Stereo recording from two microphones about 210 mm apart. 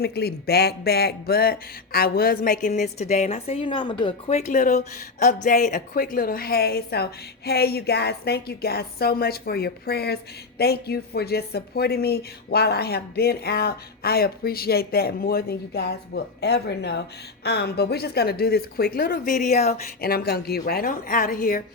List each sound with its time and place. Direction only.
0.0 s speech: 50° left (ahead or behind); by 19.8 s 30° left (ahead or behind)
20.0 s speech: 45° left (ahead or behind)